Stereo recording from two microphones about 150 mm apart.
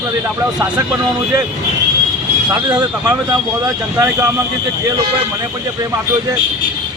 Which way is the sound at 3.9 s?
20° right (ahead or behind).